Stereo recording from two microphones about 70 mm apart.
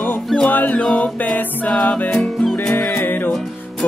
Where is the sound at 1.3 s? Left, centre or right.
Left.